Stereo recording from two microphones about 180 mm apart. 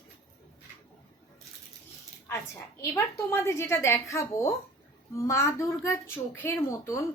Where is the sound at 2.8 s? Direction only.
15° left (ahead or behind).